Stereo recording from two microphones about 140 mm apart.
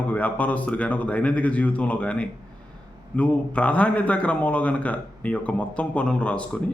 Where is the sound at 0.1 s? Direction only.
10° left (ahead or behind).